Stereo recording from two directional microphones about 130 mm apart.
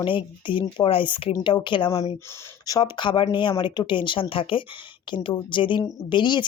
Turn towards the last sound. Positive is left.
turn(degrees=35)  # may be behind; listen again after turning